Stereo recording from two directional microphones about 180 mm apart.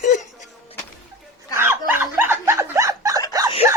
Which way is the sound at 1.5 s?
15° right (ahead or behind).